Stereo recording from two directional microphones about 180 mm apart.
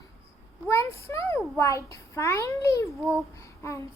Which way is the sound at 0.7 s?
15° left (ahead or behind).